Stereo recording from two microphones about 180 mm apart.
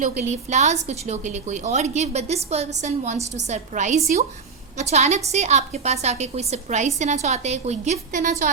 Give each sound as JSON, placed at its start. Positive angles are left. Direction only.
{"t": 0.0, "sound": "a woman's voice", "side_deg": -40}